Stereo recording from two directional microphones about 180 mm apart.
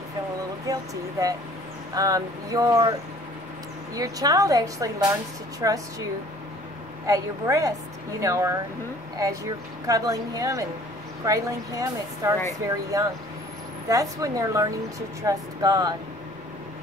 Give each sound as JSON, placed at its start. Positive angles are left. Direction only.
{"t": 0.7, "sound": "a woman's voice", "side_deg": -20}
{"t": 2.0, "sound": "a woman's voice", "side_deg": -20}
{"t": 7.1, "sound": "a woman's voice", "side_deg": -20}